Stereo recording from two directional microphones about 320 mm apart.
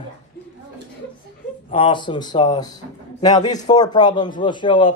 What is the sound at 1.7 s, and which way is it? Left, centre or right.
A man's voice, centre.